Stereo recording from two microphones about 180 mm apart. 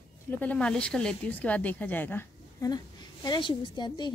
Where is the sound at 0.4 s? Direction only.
5° left (ahead or behind).